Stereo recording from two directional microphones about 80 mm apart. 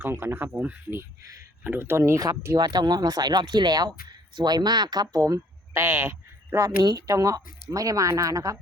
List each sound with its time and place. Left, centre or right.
0.0 s speech: right
2.6 s speech: right
5.7 s speech: right
6.9 s speech: right